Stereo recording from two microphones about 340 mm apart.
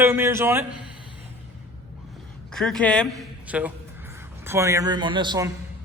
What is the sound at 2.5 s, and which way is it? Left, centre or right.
A man's voice, centre.